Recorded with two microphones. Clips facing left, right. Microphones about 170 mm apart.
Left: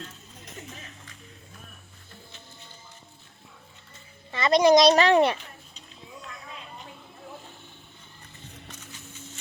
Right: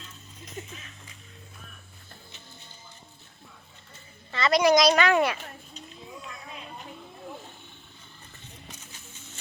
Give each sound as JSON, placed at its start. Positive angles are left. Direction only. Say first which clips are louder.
{"t": 4.3, "sound": "a child's voice", "louder": "left 3 dB", "side_deg": 20}